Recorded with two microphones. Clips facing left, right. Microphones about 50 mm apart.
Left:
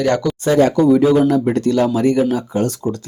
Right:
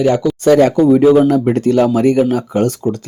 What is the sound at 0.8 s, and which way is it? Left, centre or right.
Speech, right.